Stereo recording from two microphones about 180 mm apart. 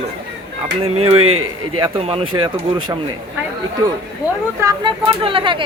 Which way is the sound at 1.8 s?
30° right (ahead or behind).